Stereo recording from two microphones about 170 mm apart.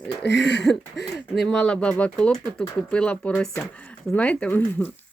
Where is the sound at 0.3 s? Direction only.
90° left.